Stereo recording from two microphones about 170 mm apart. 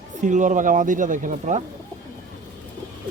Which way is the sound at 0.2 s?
50° right (ahead or behind).